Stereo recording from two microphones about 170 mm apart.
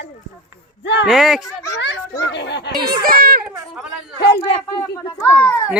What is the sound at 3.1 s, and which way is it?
Speech, 60° right (ahead or behind).